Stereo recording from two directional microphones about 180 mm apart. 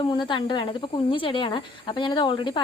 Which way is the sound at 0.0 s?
25° left (ahead or behind).